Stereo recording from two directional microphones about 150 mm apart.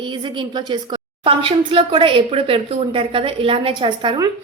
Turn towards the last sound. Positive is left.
turn(degrees=-35)  # may be behind; listen again after turning